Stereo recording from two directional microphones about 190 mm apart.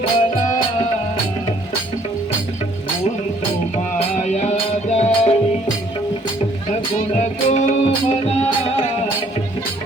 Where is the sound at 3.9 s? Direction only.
35° left (ahead or behind).